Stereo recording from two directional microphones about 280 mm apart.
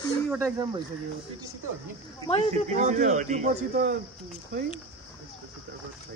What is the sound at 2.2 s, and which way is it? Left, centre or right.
Speech, left.